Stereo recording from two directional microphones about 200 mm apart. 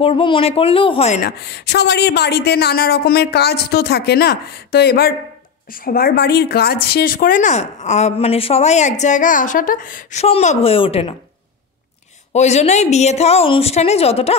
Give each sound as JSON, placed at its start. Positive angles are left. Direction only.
{"t": 0.0, "sound": "speech", "side_deg": 25}
{"t": 1.2, "sound": "a woman's voice", "side_deg": 55}
{"t": 12.3, "sound": "a woman's voice", "side_deg": 35}